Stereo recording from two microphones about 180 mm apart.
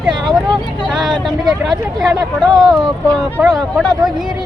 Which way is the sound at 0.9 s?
Centre (ahead or behind).